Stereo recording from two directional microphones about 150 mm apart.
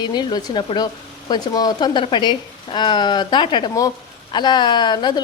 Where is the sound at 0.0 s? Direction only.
30° left (ahead or behind).